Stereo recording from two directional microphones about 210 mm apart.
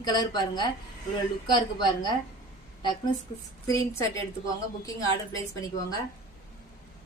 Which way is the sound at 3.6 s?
15° left (ahead or behind).